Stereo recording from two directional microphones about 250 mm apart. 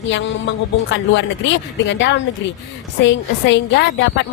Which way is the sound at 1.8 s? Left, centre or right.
Left.